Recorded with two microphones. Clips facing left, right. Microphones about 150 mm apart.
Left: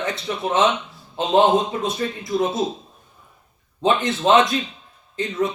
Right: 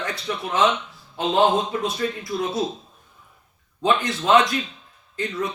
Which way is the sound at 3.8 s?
25° left (ahead or behind).